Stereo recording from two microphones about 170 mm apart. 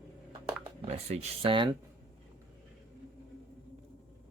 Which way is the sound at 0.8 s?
40° right (ahead or behind).